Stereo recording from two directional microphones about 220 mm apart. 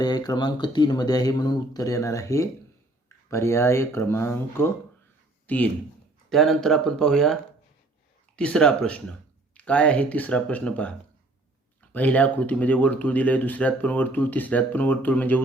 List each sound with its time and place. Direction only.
0.0 s speech: 20° left (ahead or behind); by 7.3 s centre (ahead or behind)
8.4 s speech: 5° left (ahead or behind)